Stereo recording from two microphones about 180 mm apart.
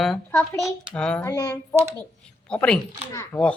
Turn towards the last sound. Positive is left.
turn(degrees=20)  # may be behind; listen again after turning